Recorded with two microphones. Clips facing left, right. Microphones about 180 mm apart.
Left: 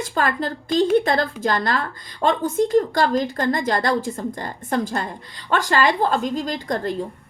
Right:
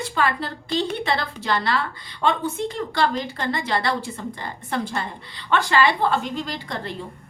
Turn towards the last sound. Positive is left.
turn(degrees=45)  # may be behind; listen again after turning